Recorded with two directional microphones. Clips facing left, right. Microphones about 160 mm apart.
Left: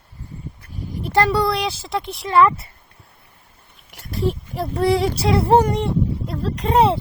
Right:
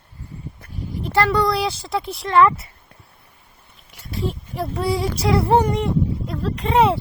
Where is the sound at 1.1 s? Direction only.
15° left (ahead or behind).